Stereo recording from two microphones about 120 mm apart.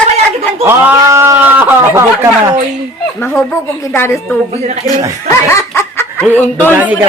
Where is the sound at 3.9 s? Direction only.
20° left (ahead or behind).